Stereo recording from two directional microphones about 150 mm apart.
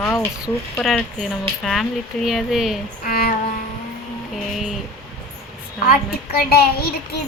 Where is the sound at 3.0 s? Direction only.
65° left (ahead or behind).